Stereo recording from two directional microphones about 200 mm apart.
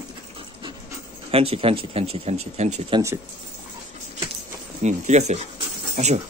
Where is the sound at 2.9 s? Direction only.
15° right (ahead or behind).